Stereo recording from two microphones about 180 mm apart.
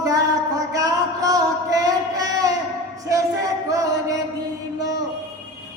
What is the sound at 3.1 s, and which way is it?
Chant, 20° right (ahead or behind).